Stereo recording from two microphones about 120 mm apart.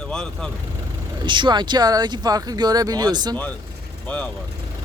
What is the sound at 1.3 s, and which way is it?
Speech, 40° right (ahead or behind).